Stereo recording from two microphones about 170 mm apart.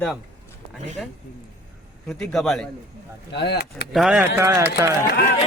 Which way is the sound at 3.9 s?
Centre (ahead or behind).